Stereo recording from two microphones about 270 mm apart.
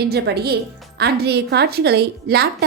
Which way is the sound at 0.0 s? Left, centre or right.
Right.